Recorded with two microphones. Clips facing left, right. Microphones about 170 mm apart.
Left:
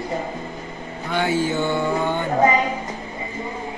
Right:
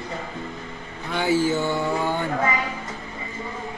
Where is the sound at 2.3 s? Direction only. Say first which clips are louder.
Left 7 dB; 20° left (ahead or behind).